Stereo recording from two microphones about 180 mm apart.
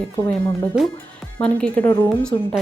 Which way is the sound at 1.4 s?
5° left (ahead or behind).